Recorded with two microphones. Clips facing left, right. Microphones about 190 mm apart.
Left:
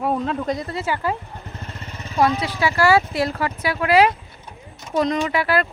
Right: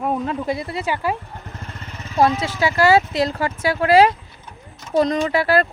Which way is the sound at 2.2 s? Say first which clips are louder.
Right 2 dB; 25° right (ahead or behind).